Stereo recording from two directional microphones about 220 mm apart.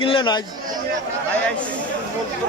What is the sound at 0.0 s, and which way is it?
Speech, 20° left (ahead or behind).